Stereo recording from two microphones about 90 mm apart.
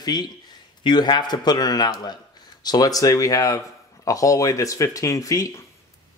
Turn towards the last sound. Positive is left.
turn(degrees=40)  # may be behind; listen again after turning